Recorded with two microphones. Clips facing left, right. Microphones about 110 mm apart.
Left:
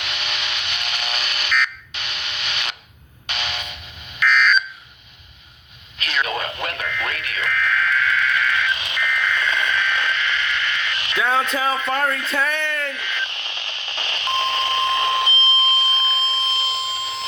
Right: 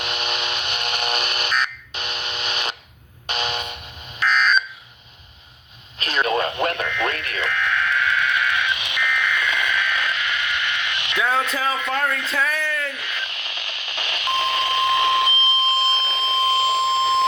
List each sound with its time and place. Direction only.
0.0 s a sound: 45° right (ahead or behind)
3.2 s music: 45° right (ahead or behind)
4.2 s fire alarm: 35° right (ahead or behind)
6.0 s radio: 40° right (ahead or behind)
6.7 s radio: 25° right (ahead or behind)
11.2 s speech: centre (ahead or behind)
12.3 s radio: centre (ahead or behind)
16.0 s alarm: 90° right